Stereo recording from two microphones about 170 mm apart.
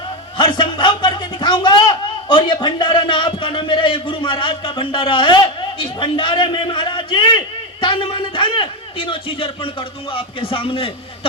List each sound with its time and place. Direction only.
0.3 s a man's voice: 25° left (ahead or behind)